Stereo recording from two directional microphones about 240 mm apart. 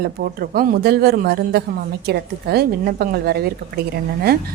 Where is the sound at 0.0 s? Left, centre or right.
Right.